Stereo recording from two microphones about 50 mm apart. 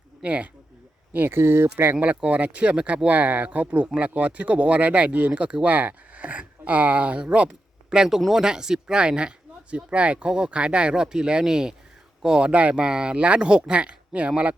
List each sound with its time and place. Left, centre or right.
0.2 s speech: right
1.1 s speech: right
2.0 s speech: right
12.5 s speech: right